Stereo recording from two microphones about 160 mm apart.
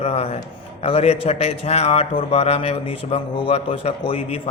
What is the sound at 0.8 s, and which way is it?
A man's voice, 40° left (ahead or behind).